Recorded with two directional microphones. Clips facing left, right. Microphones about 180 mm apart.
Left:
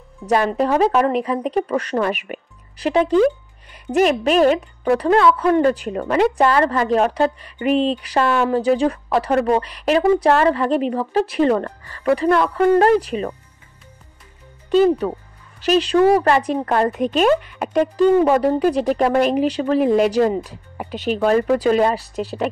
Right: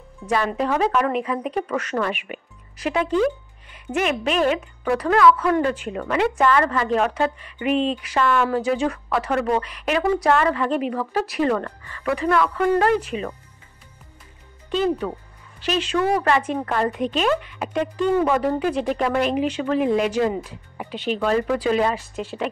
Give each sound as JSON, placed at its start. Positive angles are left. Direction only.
{"t": 0.5, "sound": "speech", "side_deg": 40}
{"t": 14.7, "sound": "speech", "side_deg": 40}